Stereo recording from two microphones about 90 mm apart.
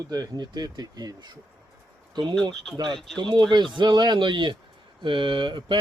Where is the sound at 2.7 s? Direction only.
50° right (ahead or behind).